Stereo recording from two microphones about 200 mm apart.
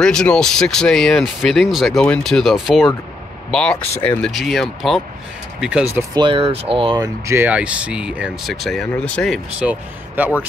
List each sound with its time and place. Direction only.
0.0 s speech: 5° left (ahead or behind)
4.0 s speech: 5° left (ahead or behind)
6.1 s speech: 25° right (ahead or behind); by 10.3 s 10° right (ahead or behind)